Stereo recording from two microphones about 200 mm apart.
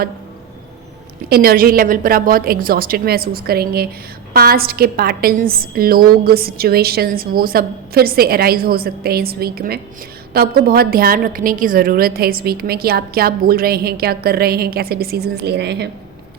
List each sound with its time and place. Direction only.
1.3 s a woman's voice: 50° right (ahead or behind)